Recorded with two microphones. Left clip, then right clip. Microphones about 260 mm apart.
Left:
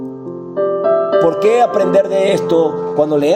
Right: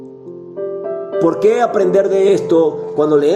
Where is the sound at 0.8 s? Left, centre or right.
Left.